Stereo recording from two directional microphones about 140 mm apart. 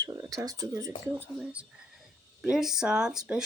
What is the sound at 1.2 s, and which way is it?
A child's voice, 10° right (ahead or behind).